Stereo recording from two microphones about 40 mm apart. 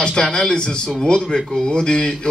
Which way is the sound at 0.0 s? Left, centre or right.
Centre.